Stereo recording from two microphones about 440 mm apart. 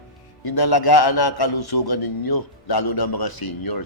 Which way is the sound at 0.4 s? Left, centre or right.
Left.